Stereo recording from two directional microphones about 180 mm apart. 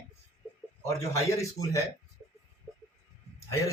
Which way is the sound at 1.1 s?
15° left (ahead or behind).